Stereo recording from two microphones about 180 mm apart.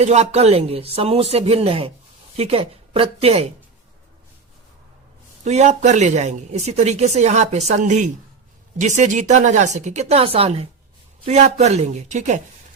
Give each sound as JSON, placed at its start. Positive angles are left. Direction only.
{"t": 0.0, "sound": "speech", "side_deg": -35}
{"t": 5.5, "sound": "speech", "side_deg": -40}